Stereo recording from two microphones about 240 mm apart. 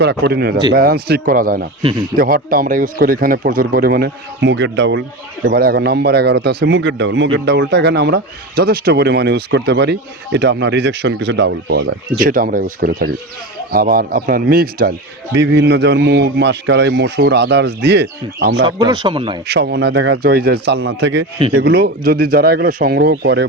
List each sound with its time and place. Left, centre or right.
0.0 s a man's voice: right
1.8 s speech: centre
2.1 s a man's voice: right
18.6 s speech: centre
19.5 s a man's voice: right